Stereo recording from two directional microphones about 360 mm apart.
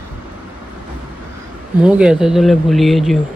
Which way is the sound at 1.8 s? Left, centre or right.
Centre.